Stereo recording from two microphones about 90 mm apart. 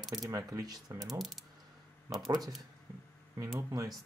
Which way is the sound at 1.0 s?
Centre (ahead or behind).